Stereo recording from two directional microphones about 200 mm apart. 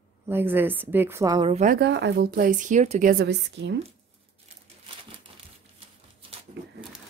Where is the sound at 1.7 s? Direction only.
55° right (ahead or behind).